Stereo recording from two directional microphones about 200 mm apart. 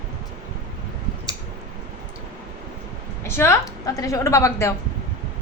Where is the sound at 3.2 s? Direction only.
15° left (ahead or behind).